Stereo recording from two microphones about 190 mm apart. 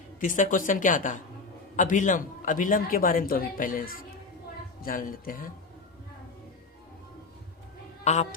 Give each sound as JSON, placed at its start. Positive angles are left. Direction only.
{"t": 0.2, "sound": "a woman's voice", "side_deg": 45}
{"t": 8.0, "sound": "a woman's voice", "side_deg": 35}